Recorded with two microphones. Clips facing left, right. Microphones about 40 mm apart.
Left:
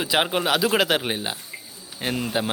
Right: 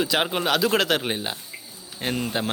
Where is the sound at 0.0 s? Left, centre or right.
Centre.